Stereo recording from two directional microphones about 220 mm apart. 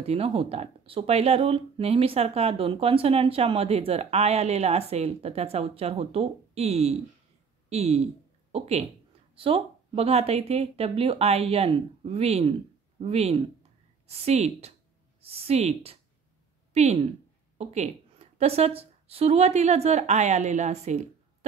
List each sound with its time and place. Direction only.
0.0 s a woman's voice: 25° right (ahead or behind)